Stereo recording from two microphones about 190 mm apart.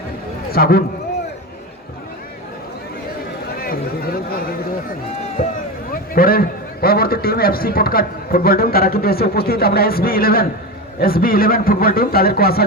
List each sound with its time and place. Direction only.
0.5 s a man's voice: 55° left (ahead or behind)
3.5 s a sound: 50° left (ahead or behind)
5.9 s a man's voice: 50° left (ahead or behind)